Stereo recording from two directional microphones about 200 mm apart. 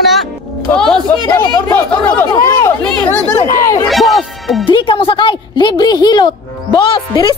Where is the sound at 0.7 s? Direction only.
5° left (ahead or behind).